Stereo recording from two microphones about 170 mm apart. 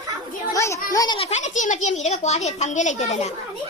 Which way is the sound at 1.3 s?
45° left (ahead or behind).